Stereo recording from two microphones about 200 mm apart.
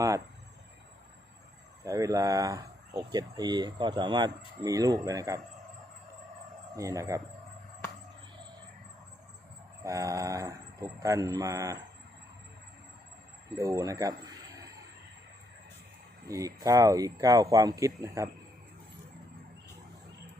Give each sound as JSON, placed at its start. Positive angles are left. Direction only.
{"t": 1.8, "sound": "speech", "side_deg": -15}
{"t": 6.7, "sound": "speech", "side_deg": -15}
{"t": 9.8, "sound": "speech", "side_deg": -15}
{"t": 13.6, "sound": "speech", "side_deg": -15}
{"t": 16.3, "sound": "speech", "side_deg": -15}